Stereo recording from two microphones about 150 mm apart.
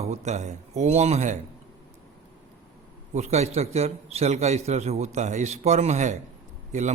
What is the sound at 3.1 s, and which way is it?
A man's voice, 50° right (ahead or behind).